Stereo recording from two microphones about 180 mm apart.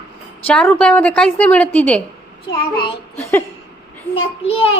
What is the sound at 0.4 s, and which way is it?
A woman's voice, 10° left (ahead or behind).